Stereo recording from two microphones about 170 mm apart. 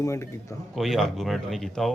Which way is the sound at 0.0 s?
15° left (ahead or behind).